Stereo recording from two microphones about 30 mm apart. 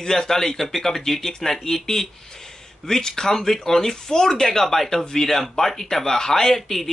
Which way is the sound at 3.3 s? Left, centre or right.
Centre.